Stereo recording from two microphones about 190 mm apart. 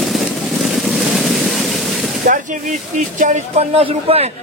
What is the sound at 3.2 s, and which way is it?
Speech, 35° right (ahead or behind).